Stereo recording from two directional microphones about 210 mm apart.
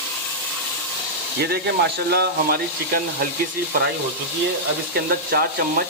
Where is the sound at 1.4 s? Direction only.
50° right (ahead or behind).